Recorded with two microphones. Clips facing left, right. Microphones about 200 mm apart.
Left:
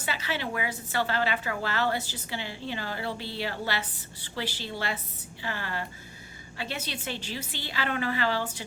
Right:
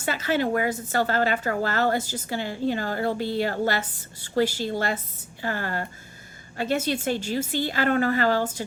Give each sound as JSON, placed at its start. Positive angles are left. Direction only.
{"t": 0.0, "sound": "a woman's voice", "side_deg": -45}